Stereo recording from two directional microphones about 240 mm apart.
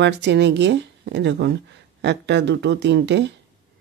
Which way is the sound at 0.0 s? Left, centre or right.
Right.